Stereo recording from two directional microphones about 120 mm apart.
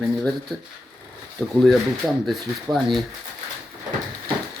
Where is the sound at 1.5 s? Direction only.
Centre (ahead or behind).